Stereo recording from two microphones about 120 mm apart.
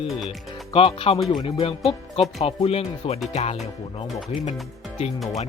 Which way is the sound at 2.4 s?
55° left (ahead or behind).